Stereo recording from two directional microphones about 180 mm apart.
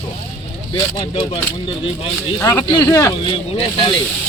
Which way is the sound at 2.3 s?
15° left (ahead or behind).